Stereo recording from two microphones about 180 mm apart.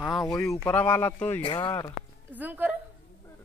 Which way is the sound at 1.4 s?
30° left (ahead or behind).